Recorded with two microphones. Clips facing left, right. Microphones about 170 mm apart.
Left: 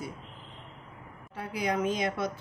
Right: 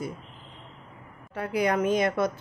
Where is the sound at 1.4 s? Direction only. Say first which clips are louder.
Right 5 dB; 60° right (ahead or behind).